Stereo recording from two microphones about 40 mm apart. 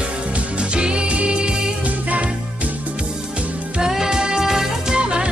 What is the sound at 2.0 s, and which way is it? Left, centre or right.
Music, right.